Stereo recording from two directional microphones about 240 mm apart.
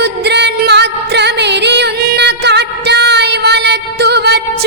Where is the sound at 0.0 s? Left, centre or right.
Right.